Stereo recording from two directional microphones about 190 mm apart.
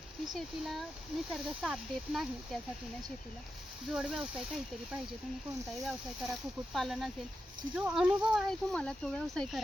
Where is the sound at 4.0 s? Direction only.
Centre (ahead or behind).